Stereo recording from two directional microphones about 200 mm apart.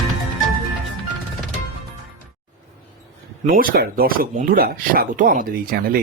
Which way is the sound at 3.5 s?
45° right (ahead or behind).